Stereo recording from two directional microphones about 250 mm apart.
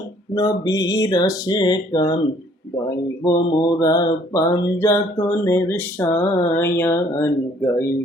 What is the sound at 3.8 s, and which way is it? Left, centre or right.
Speech, centre.